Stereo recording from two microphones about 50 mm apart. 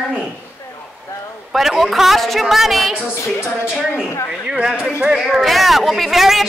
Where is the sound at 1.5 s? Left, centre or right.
Centre.